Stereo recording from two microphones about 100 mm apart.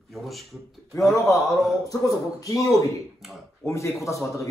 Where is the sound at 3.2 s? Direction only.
Centre (ahead or behind).